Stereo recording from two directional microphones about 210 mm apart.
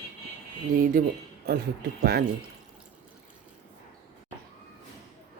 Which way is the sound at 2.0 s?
45° right (ahead or behind).